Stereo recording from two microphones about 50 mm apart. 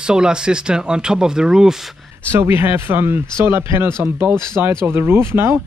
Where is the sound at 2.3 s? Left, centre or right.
Right.